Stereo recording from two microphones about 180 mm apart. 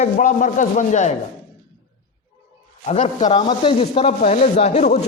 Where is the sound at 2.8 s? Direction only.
35° left (ahead or behind).